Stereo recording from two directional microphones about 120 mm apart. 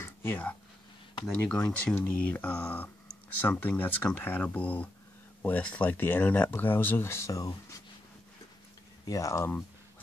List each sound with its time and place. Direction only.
0.0 s a sound: 20° left (ahead or behind)
1.4 s speech: 10° left (ahead or behind); by 7.5 s 30° left (ahead or behind)
9.0 s speech: 30° left (ahead or behind)